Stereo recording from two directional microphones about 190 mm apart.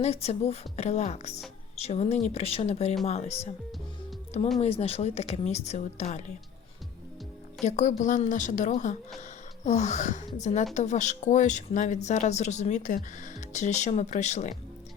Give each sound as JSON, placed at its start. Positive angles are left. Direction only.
{"t": 0.0, "sound": "speech", "side_deg": 35}
{"t": 4.6, "sound": "speech", "side_deg": 35}
{"t": 7.6, "sound": "speech", "side_deg": 40}